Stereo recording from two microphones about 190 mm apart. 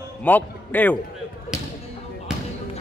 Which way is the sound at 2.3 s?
5° right (ahead or behind).